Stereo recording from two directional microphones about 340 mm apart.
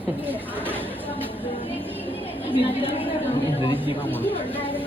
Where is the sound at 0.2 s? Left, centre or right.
Centre.